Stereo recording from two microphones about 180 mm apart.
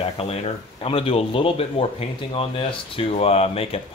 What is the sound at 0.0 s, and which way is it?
Speech, 35° left (ahead or behind).